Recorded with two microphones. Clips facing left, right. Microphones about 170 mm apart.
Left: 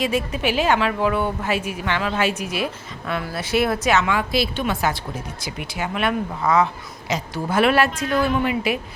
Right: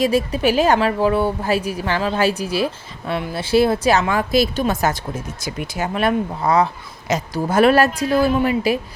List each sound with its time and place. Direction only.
0.0 s a woman's voice: 35° right (ahead or behind)